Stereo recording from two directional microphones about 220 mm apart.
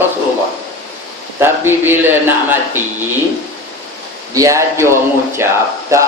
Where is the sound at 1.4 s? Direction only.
10° right (ahead or behind).